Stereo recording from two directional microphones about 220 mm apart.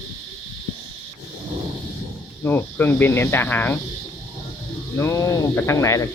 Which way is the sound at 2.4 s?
10° left (ahead or behind).